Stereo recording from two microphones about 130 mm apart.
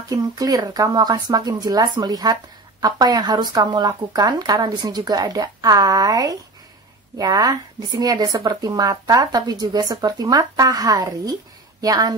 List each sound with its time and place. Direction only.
0.1 s speech: 30° right (ahead or behind)